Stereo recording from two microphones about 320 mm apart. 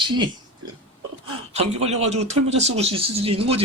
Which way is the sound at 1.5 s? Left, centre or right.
Centre.